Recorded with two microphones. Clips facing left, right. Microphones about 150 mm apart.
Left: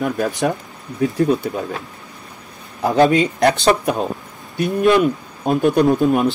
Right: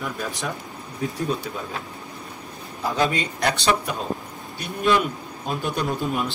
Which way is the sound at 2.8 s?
50° left (ahead or behind).